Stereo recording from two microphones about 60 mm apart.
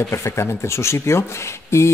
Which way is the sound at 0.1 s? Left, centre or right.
Left.